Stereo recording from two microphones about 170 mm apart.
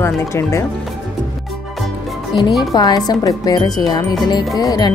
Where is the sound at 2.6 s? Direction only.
25° left (ahead or behind).